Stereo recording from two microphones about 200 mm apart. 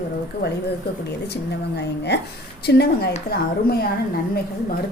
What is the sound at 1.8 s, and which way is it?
A woman's voice, 55° left (ahead or behind).